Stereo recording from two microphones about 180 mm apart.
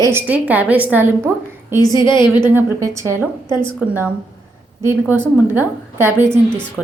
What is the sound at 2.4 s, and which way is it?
A woman's voice, 15° right (ahead or behind).